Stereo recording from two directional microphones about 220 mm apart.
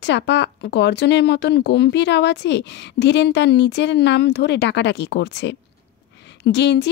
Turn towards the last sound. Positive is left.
turn(degrees=50)  # may be behind; listen again after turning